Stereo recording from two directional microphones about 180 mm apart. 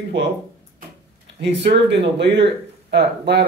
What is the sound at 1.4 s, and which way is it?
Speech, 75° right (ahead or behind).